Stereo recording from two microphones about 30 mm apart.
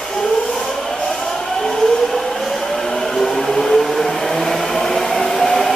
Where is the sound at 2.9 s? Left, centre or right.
Centre.